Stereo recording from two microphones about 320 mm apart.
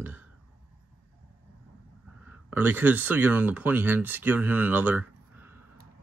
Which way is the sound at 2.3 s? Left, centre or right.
Centre.